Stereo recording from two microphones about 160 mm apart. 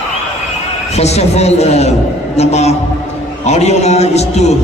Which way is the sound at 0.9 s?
40° left (ahead or behind).